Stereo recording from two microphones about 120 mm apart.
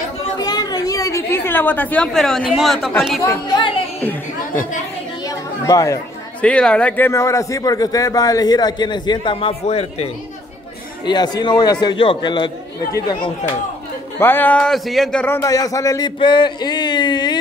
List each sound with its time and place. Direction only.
0.5 s chatter: 35° left (ahead or behind); by 2.0 s 15° left (ahead or behind)
2.1 s a man's voice: 5° left (ahead or behind)
3.2 s speech: 30° left (ahead or behind)
5.7 s speech: 25° left (ahead or behind)
6.4 s speech: 10° left (ahead or behind)
7.1 s a man's voice: 25° left (ahead or behind); by 10.0 s 60° left (ahead or behind)
11.1 s a man's voice: 35° left (ahead or behind)
14.2 s speech: 15° left (ahead or behind)
15.4 s speech: 30° left (ahead or behind)
16.2 s speech: 40° left (ahead or behind)